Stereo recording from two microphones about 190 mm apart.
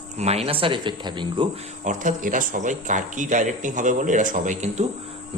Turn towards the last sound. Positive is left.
turn(degrees=-35)  # may be behind; listen again after turning